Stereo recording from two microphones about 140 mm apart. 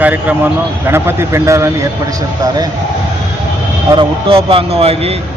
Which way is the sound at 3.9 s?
40° right (ahead or behind).